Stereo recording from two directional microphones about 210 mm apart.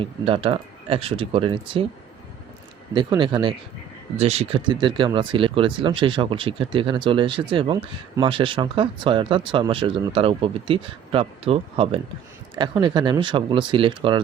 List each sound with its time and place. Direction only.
0.0 s speech: 25° right (ahead or behind)
2.9 s speech: 20° right (ahead or behind)